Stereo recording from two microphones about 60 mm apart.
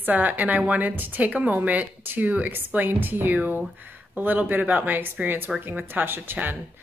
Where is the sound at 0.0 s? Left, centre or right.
Right.